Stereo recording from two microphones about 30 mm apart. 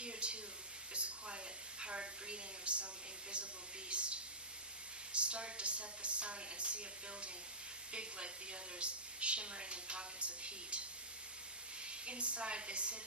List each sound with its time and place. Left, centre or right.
0.0 s a sound: right
5.1 s a woman's voice: right
8.8 s a woman's voice: right
11.9 s a woman's voice: right